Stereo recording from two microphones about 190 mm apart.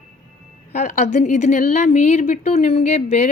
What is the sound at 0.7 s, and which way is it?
A woman's voice, 40° left (ahead or behind).